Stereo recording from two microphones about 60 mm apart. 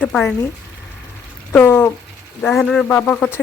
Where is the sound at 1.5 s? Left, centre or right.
Left.